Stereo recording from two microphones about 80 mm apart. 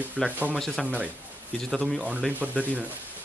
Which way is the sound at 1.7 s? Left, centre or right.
Centre.